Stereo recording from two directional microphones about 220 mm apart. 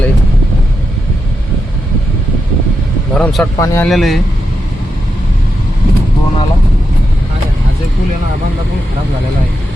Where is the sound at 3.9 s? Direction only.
Centre (ahead or behind).